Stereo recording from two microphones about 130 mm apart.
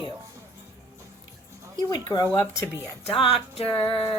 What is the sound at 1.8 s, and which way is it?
Speech, 30° left (ahead or behind).